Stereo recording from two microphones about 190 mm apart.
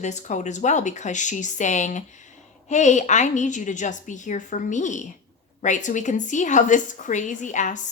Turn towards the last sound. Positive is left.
turn(degrees=40)  # may be behind; listen again after turning